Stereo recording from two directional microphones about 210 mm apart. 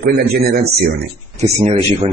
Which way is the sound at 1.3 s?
25° right (ahead or behind).